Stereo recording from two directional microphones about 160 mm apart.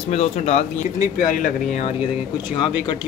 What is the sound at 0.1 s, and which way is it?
Speech, 45° left (ahead or behind).